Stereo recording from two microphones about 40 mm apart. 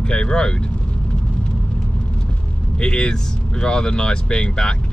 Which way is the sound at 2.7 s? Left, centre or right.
Left.